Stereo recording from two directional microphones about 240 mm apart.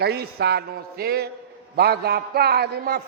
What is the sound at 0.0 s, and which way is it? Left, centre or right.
A man's voice, right.